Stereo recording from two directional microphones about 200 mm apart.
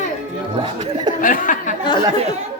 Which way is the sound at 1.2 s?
40° left (ahead or behind).